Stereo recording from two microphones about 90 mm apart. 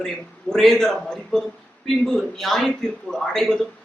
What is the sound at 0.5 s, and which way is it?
Speech, 5° left (ahead or behind).